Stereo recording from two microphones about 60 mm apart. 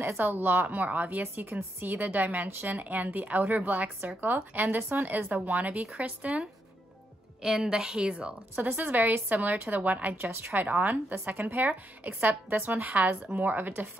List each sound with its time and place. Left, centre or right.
0.0 s a woman's voice: right
7.4 s a woman's voice: centre
8.5 s a woman's voice: right